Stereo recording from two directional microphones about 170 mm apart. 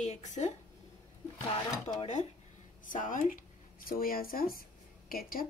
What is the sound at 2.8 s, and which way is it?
Speech, 50° left (ahead or behind).